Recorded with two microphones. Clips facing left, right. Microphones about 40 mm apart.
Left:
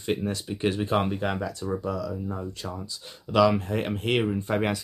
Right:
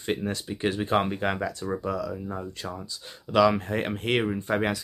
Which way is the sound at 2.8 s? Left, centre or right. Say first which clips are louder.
Left 1 dB; centre.